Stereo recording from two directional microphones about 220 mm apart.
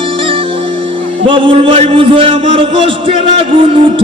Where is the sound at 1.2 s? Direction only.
25° right (ahead or behind).